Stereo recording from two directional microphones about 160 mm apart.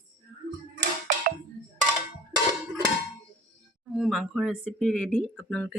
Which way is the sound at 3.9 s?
Centre (ahead or behind).